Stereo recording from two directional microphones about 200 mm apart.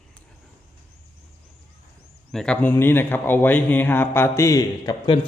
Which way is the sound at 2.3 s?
5° left (ahead or behind).